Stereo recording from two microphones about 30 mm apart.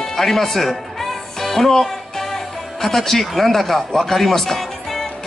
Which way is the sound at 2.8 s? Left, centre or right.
Centre.